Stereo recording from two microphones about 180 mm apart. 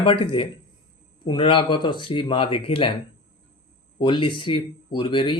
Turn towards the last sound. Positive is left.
turn(degrees=25)  # may be behind; listen again after turning